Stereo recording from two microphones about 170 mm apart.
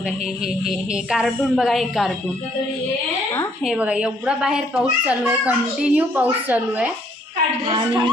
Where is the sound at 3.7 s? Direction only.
5° right (ahead or behind).